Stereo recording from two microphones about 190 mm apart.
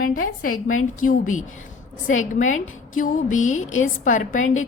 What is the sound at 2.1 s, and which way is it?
A woman's voice, 40° left (ahead or behind).